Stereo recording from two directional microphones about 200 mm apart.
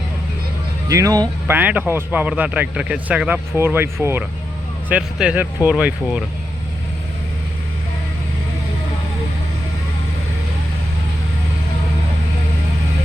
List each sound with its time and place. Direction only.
0.9 s speech: 15° right (ahead or behind)